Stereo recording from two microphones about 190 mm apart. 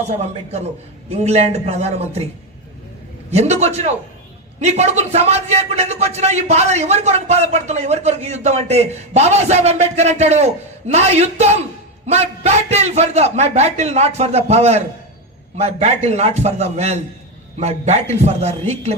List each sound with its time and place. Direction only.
0.2 s speech: 35° right (ahead or behind)
3.3 s speech: 35° right (ahead or behind)